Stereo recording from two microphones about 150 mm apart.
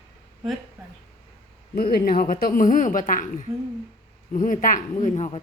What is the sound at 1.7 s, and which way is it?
Speech, 80° left.